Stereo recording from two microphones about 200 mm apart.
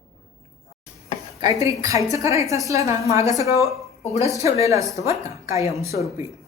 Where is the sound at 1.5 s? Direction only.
15° right (ahead or behind).